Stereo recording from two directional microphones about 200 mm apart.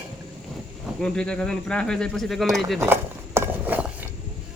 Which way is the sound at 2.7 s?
10° right (ahead or behind).